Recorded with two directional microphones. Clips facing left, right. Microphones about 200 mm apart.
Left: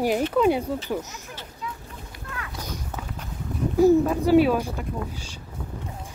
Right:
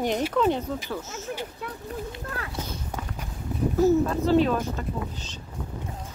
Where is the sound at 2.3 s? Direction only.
35° right (ahead or behind).